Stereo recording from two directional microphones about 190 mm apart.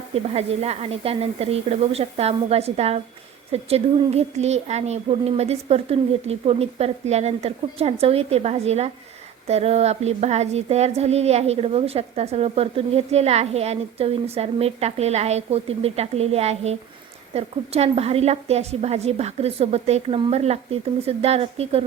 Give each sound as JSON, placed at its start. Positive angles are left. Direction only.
{"t": 0.1, "sound": "speech", "side_deg": -35}